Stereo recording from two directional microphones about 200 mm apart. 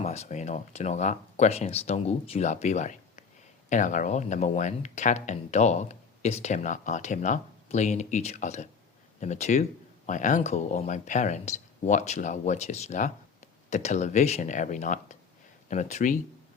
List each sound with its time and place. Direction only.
0.0 s speech: 35° left (ahead or behind)